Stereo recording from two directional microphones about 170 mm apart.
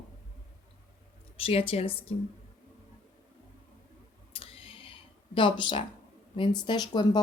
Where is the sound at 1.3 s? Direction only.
35° left (ahead or behind).